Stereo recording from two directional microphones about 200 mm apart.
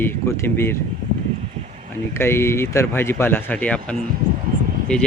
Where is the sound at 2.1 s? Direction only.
10° left (ahead or behind).